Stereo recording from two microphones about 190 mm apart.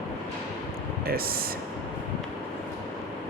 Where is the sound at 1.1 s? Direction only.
50° right (ahead or behind).